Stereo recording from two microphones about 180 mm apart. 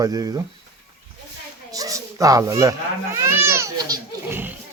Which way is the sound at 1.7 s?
20° right (ahead or behind).